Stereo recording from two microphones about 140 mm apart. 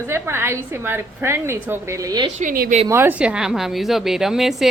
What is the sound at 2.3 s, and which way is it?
Speech, 70° right (ahead or behind).